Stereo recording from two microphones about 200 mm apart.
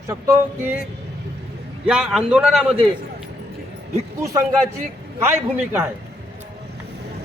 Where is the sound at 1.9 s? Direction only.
5° right (ahead or behind).